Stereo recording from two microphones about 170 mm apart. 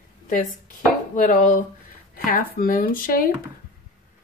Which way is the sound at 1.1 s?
50° left (ahead or behind).